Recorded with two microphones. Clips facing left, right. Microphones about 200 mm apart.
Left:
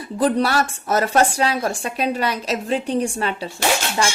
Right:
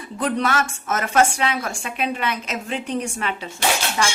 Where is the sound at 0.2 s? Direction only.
35° left (ahead or behind).